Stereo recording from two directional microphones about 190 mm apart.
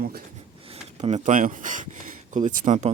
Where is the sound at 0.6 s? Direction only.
30° right (ahead or behind).